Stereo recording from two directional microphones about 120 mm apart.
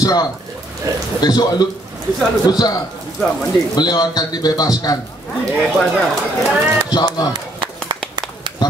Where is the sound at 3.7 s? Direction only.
35° left (ahead or behind).